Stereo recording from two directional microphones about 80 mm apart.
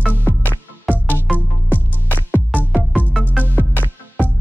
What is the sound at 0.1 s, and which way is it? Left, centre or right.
Music, left.